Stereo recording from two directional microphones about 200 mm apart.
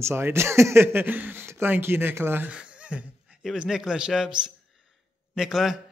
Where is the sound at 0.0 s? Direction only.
10° right (ahead or behind).